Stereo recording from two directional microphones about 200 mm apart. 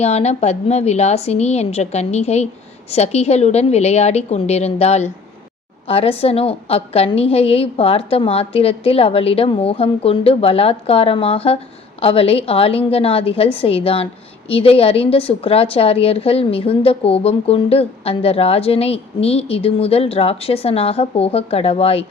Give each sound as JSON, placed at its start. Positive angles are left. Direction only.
{"t": 0.0, "sound": "a woman's voice", "side_deg": 35}